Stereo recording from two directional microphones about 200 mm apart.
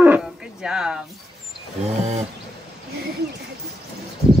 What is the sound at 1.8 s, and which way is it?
Livestock, 35° right (ahead or behind).